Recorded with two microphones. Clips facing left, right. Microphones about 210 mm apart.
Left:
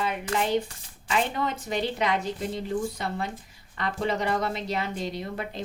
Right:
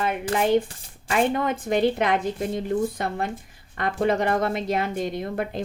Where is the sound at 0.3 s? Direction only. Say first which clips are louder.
Right 5 dB; 50° right (ahead or behind).